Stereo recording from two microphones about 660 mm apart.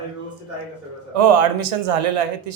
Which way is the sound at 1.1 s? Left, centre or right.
Right.